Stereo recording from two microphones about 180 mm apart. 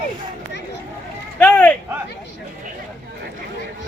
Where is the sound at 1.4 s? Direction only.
10° left (ahead or behind).